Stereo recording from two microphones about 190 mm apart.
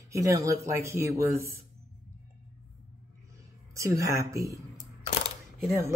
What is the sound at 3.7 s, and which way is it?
Speech, 15° right (ahead or behind).